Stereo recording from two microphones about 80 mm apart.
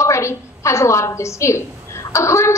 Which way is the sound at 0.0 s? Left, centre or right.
Left.